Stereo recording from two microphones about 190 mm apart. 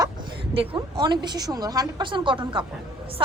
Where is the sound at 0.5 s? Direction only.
30° right (ahead or behind).